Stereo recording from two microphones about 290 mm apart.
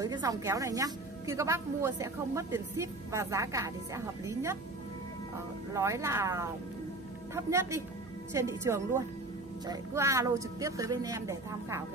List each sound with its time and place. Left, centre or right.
0.0 s a woman's voice: centre
5.7 s a woman's voice: centre